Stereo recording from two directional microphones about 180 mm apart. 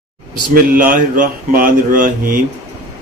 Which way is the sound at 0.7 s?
45° right (ahead or behind).